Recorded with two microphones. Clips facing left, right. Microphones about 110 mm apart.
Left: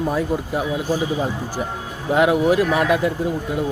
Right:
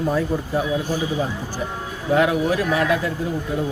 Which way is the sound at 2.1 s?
20° left (ahead or behind).